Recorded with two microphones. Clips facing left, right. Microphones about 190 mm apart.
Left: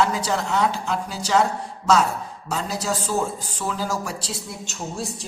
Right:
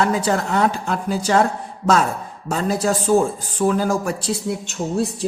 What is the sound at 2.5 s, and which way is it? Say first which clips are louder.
A man's voice: right 6 dB; 50° right (ahead or behind).